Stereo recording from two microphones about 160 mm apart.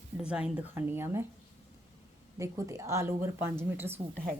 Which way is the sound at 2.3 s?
20° right (ahead or behind).